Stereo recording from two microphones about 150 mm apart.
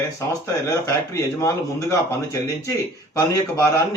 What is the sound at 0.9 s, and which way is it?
Speech, 20° left (ahead or behind).